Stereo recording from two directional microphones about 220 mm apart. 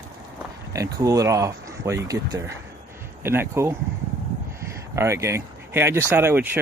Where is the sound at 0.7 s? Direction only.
15° right (ahead or behind).